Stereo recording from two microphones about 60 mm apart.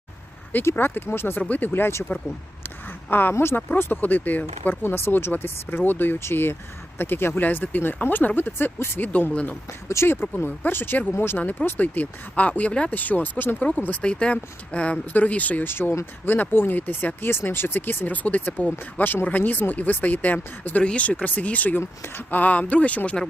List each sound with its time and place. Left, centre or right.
0.6 s speech: left
1.4 s speech: left
2.6 s a sound: left
3.3 s speech: left
9.0 s speech: left
9.9 s speech: left
15.7 s speech: left